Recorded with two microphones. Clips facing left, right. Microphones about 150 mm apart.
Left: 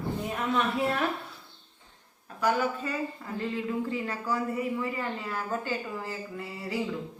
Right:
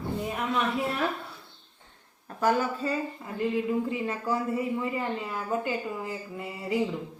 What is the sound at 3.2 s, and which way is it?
Speech, 15° right (ahead or behind).